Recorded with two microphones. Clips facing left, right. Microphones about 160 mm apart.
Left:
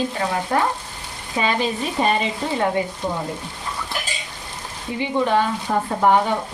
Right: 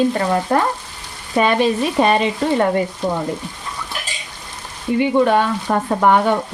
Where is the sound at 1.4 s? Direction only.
60° right (ahead or behind).